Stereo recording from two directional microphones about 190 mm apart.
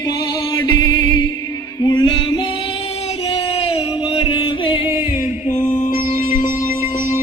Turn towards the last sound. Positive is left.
turn(degrees=45)  # may be behind; listen again after turning